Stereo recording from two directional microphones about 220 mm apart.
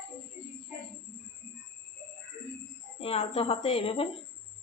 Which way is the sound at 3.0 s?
25° left (ahead or behind).